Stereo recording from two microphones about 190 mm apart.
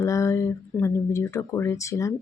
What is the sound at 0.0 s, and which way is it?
Speech, 15° left (ahead or behind).